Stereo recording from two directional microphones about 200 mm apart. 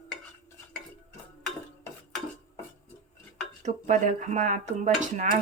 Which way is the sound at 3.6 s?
35° right (ahead or behind).